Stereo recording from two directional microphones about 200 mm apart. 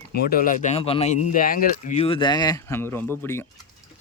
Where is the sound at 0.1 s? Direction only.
50° left (ahead or behind); by 3.4 s 10° left (ahead or behind).